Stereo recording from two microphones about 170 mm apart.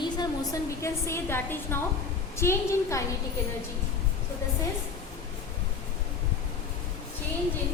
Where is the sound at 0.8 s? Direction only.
15° left (ahead or behind).